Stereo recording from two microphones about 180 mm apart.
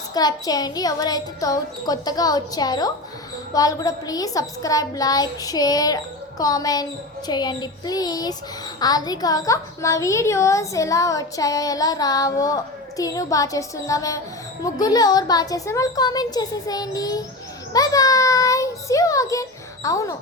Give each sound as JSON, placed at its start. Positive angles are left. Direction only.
{"t": 0.1, "sound": "a woman's voice", "side_deg": 20}